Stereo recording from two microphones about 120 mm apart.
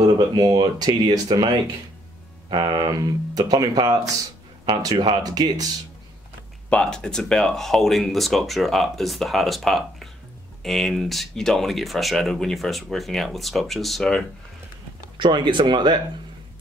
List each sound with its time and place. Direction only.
0.0 s speech: 35° right (ahead or behind)
2.5 s speech: 40° right (ahead or behind)
6.7 s speech: 10° left (ahead or behind)
15.1 s speech: 40° right (ahead or behind)